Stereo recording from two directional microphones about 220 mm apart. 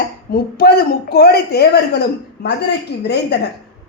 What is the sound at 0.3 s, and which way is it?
A man's voice, 40° left (ahead or behind).